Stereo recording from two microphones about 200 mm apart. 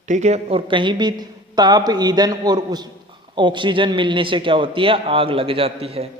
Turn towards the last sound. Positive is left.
turn(degrees=-30)  # may be behind; listen again after turning